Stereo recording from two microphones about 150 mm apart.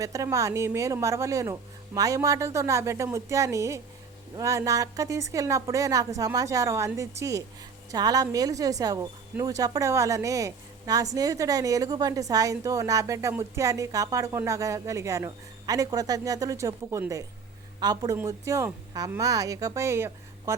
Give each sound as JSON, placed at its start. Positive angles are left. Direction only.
{"t": 0.0, "sound": "a woman's voice", "side_deg": -20}